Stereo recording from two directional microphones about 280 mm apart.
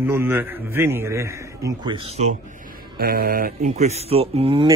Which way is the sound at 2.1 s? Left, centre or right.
Right.